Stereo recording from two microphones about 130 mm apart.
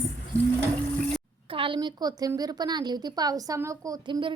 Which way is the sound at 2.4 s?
30° right (ahead or behind).